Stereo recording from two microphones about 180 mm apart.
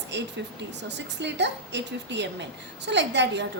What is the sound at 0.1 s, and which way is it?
A woman's voice, 80° right.